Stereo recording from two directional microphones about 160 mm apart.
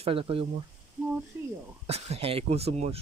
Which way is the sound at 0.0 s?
35° right (ahead or behind).